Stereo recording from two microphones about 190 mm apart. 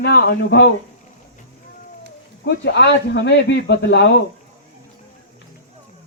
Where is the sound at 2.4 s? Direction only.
65° left (ahead or behind).